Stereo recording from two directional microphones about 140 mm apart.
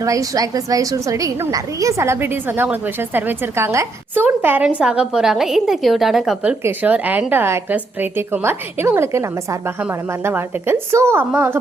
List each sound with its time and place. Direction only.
0.0 s a woman's voice: 25° right (ahead or behind)